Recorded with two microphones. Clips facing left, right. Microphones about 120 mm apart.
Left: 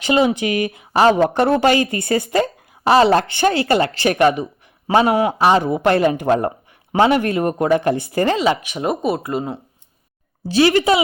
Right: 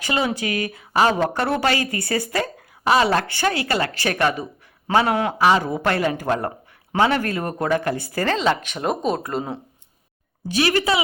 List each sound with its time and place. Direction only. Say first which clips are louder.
0.0 s a woman's voice: left 7 dB; 20° left (ahead or behind)
5.4 s a woman's voice: left 3 dB; 25° left (ahead or behind); by 9.6 s centre (ahead or behind)
10.5 s a woman's voice: left 6 dB; 25° left (ahead or behind)